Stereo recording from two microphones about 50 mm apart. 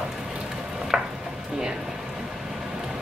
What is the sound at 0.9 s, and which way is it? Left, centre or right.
Stir, centre.